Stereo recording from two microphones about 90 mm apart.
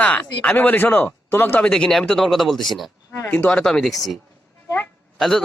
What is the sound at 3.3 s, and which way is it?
Speech, 15° left (ahead or behind).